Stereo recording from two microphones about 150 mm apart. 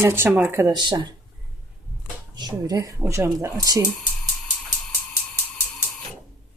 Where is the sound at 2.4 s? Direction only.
25° right (ahead or behind).